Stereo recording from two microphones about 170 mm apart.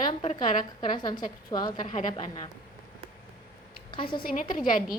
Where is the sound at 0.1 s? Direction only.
30° left (ahead or behind).